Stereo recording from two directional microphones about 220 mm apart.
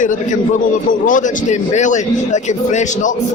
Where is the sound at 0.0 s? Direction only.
35° left (ahead or behind).